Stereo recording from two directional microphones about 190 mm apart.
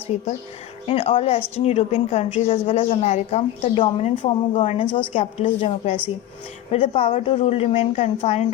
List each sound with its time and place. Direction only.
0.9 s a woman's voice: 30° left (ahead or behind)